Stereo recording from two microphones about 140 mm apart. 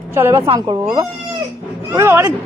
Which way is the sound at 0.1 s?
15° right (ahead or behind).